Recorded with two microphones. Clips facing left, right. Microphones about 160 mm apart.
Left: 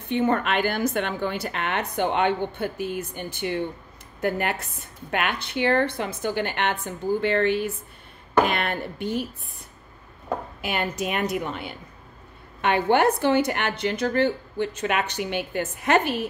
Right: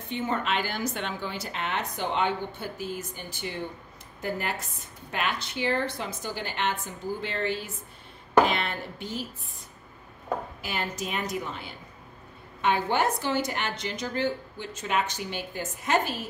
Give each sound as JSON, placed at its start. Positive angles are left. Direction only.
{"t": 0.1, "sound": "a woman's voice", "side_deg": 60}
{"t": 10.6, "sound": "a woman's voice", "side_deg": 60}